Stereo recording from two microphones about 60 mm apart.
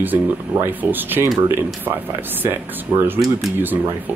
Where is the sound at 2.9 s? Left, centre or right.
Right.